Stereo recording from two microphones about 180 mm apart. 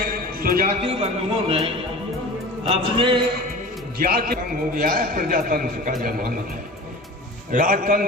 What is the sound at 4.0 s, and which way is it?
A man's voice, 55° right (ahead or behind).